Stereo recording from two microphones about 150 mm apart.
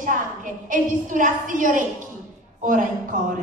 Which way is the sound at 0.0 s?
60° right (ahead or behind).